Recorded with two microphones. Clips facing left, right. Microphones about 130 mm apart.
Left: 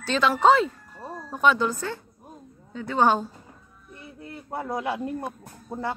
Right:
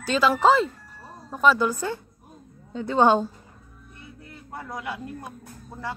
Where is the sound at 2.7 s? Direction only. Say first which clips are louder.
Right 2 dB; 25° right (ahead or behind).